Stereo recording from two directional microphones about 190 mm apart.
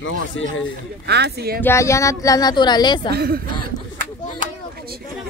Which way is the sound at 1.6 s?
15° left (ahead or behind).